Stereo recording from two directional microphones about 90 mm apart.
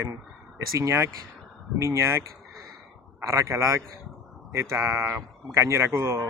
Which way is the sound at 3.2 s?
35° right (ahead or behind).